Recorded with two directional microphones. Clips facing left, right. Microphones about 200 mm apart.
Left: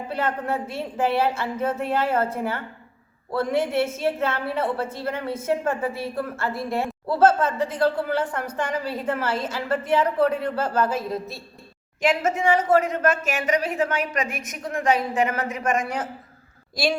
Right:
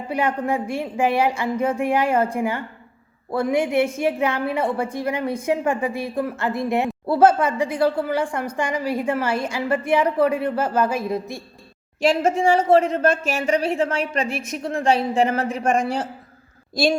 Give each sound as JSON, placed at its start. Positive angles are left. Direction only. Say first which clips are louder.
{"t": 0.1, "sound": "a woman's voice", "louder": "right 4 dB", "side_deg": -15}
{"t": 12.0, "sound": "speech", "louder": "right 3 dB", "side_deg": -30}